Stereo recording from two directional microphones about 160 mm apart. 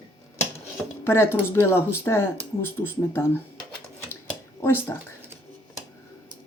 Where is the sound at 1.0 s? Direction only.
15° left (ahead or behind).